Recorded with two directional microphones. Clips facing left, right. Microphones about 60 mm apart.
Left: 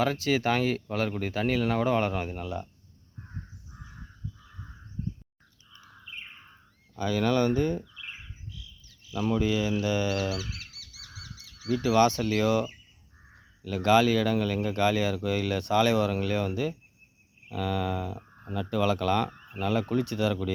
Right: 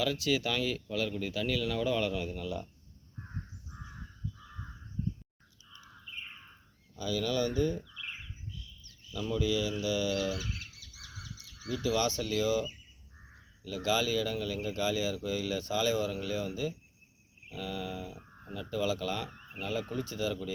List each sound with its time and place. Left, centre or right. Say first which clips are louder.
0.0 s speech: left 5 dB; left
5.0 s bird: even; left
6.9 s speech: left 6 dB; left
8.4 s cricket: left 1 dB; left
9.4 s speech: left 4 dB; left
10.2 s crow: left 3 dB; left
11.7 s speech: left 8 dB; left
17.5 s mantra: left 8 dB; left
18.4 s speech: left 6 dB; left
19.9 s mantra: left 7 dB; left